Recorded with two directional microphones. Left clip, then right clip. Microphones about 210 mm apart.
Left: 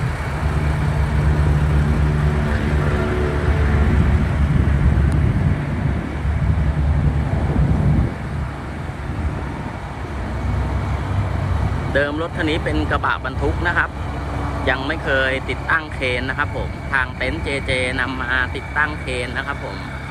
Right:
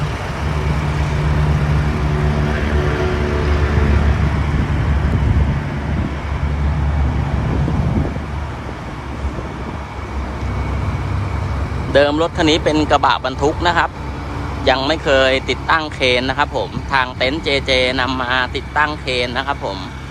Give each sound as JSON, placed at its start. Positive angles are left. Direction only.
{"t": 11.9, "sound": "speech", "side_deg": -15}